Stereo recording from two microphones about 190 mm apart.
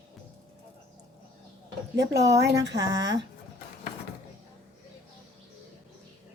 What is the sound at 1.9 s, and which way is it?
A woman's voice, 65° right (ahead or behind).